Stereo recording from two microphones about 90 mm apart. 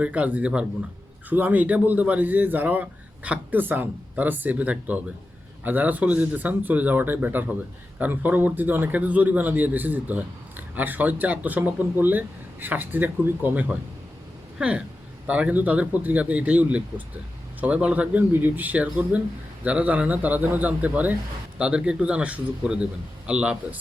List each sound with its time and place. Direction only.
0.0 s a man's voice: 15° right (ahead or behind)